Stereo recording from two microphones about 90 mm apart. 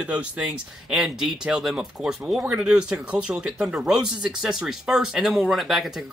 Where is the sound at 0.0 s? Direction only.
15° right (ahead or behind).